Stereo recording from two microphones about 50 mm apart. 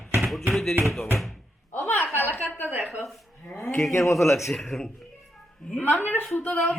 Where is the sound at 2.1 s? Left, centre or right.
Left.